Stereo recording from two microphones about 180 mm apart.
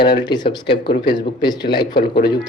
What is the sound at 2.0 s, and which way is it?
Speech, 60° left (ahead or behind).